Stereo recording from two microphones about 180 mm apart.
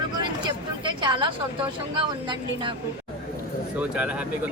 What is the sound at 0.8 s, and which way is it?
Speech, 25° right (ahead or behind).